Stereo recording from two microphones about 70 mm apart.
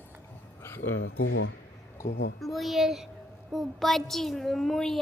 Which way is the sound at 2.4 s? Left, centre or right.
Centre.